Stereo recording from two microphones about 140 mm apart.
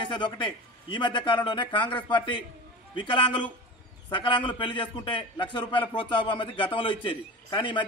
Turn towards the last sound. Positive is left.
turn(degrees=35)  # may be behind; listen again after turning